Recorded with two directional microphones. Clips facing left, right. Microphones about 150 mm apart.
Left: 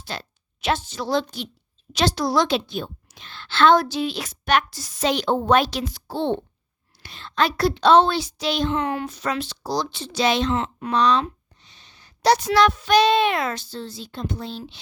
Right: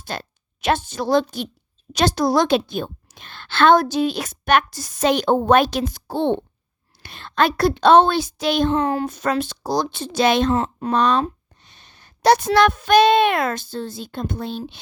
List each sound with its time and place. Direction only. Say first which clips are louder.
0.0 s a woman's voice: right 3 dB; 50° right (ahead or behind)
10.9 s speech: right 1 dB; 50° right (ahead or behind)